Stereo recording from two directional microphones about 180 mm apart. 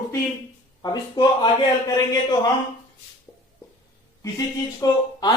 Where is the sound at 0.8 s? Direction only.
25° left (ahead or behind).